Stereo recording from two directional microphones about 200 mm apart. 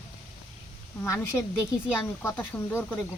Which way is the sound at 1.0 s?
15° left (ahead or behind).